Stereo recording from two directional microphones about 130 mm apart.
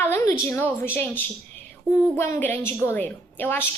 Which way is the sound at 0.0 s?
20° left (ahead or behind).